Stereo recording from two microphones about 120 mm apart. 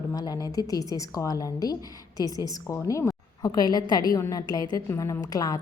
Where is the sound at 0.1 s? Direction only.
30° left (ahead or behind).